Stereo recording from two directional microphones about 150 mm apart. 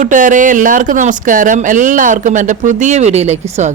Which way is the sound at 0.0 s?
60° right (ahead or behind).